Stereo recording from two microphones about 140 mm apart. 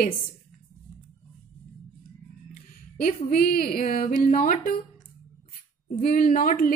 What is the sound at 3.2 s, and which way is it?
Speech, 90° left.